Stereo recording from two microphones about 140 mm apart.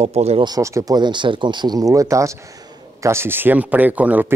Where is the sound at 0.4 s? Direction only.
25° right (ahead or behind).